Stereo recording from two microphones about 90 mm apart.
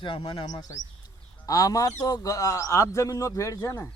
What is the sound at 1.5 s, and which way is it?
Speech, 40° left (ahead or behind).